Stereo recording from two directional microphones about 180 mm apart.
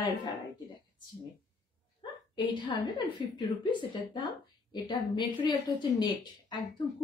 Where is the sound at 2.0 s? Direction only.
25° left (ahead or behind).